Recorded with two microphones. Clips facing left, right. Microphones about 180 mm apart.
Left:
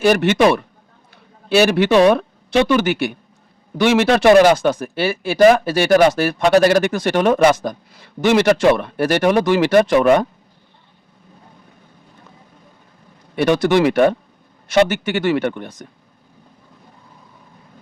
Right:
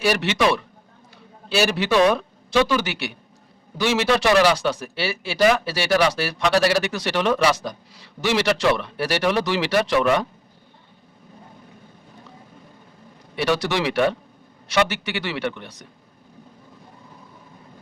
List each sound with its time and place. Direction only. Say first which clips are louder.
0.0 s a man's voice: left 7 dB; 50° left (ahead or behind)
13.3 s a man's voice: left 7 dB; 50° left (ahead or behind)